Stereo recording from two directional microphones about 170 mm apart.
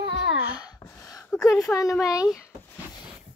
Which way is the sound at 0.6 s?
20° left (ahead or behind).